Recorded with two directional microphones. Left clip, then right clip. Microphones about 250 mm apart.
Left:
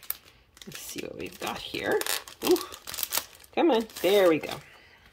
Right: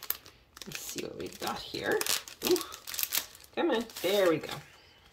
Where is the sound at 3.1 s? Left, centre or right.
Centre.